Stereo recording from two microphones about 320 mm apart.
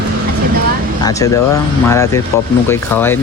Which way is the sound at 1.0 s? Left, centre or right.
Centre.